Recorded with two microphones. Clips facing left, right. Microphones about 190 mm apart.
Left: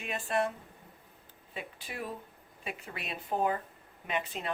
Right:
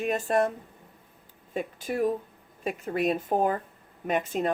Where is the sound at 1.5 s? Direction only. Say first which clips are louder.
Right 12 dB; 45° right (ahead or behind).